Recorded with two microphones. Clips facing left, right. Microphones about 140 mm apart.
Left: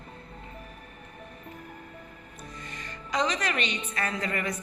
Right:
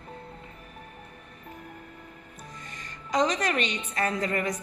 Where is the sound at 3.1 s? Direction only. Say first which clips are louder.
Right 3 dB; 45° right (ahead or behind).